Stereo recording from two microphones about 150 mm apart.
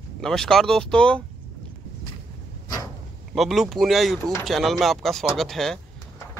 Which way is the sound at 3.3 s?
Centre (ahead or behind).